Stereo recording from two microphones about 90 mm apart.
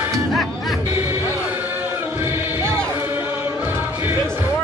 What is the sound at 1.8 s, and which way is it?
Music, 20° right (ahead or behind).